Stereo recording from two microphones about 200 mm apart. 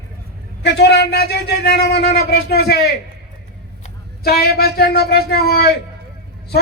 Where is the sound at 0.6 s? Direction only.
60° left (ahead or behind).